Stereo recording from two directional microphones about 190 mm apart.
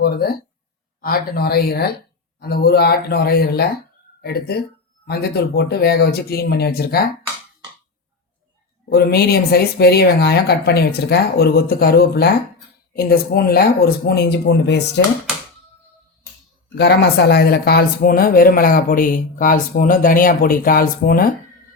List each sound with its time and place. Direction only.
0.0 s speech: 55° left (ahead or behind)
8.9 s speech: 55° left (ahead or behind)
16.7 s speech: 60° left (ahead or behind)